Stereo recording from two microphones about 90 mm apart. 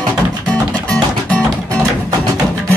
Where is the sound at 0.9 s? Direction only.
15° left (ahead or behind).